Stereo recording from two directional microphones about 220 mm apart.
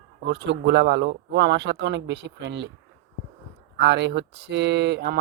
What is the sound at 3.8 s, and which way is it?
Speech, 50° right (ahead or behind).